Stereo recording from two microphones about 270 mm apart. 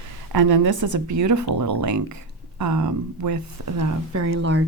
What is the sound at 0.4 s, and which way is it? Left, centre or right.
Speech, right.